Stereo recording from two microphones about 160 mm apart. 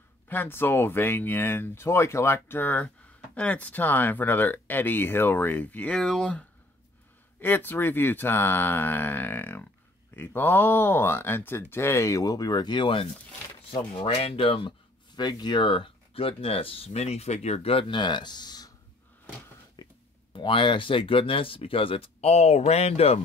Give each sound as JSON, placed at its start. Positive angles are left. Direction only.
{"t": 0.3, "sound": "speech", "side_deg": 15}
{"t": 19.8, "sound": "whispering", "side_deg": 25}
{"t": 20.3, "sound": "speech", "side_deg": 30}